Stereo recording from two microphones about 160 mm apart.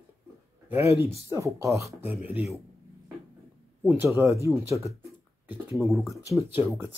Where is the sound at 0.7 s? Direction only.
15° right (ahead or behind).